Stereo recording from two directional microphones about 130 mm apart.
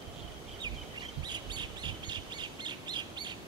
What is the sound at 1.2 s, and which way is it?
Bird, 35° right (ahead or behind).